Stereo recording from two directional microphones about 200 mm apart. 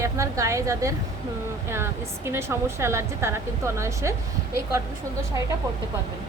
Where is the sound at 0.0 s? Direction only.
15° right (ahead or behind).